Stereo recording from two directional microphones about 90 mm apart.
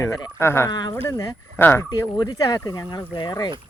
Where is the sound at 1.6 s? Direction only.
20° left (ahead or behind).